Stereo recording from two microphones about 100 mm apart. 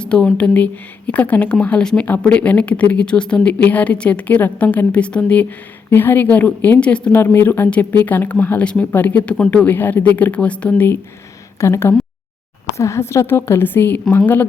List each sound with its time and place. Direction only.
0.0 s a woman's voice: 10° left (ahead or behind)
11.6 s a woman's voice: 25° left (ahead or behind)